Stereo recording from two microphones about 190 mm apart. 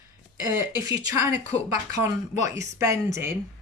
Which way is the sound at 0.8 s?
20° right (ahead or behind).